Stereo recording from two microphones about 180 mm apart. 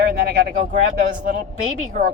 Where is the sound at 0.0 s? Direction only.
60° right (ahead or behind).